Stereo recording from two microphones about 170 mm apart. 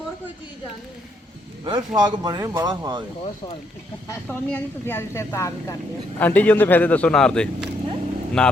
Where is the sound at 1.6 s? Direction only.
25° right (ahead or behind).